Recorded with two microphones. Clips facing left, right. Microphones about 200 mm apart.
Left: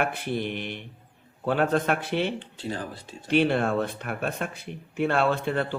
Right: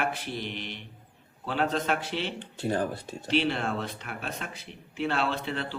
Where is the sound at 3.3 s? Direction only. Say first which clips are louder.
Left 5 dB; 50° left (ahead or behind).